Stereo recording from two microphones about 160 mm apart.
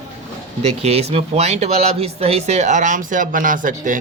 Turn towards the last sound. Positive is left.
turn(degrees=-55)  # may be behind; listen again after turning